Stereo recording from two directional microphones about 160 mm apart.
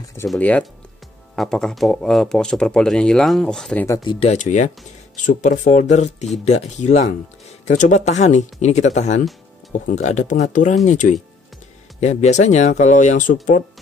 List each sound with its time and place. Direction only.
0.3 s speech: 5° left (ahead or behind)
3.8 s speech: 25° left (ahead or behind)
4.3 s speech: 50° left (ahead or behind)